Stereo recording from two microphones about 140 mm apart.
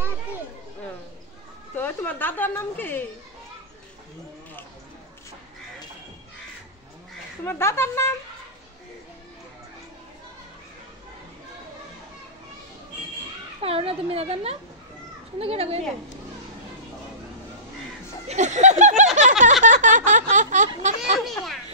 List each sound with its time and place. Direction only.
1.8 s a woman's voice: 15° left (ahead or behind)
7.4 s a woman's voice: 15° left (ahead or behind)
13.6 s a woman's voice: 45° right (ahead or behind)
18.2 s speech: 55° right (ahead or behind)
19.1 s a sound: 60° right (ahead or behind)
19.6 s snicker: 65° right (ahead or behind)